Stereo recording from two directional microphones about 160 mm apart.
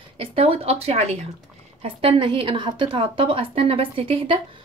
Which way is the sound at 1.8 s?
35° right (ahead or behind).